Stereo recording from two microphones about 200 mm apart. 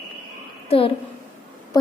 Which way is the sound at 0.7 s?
30° left (ahead or behind).